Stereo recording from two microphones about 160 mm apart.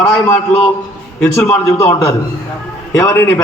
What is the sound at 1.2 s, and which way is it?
A man's voice, 15° left (ahead or behind).